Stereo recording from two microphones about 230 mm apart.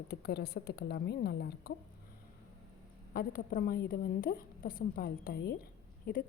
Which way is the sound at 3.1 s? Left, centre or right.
Left.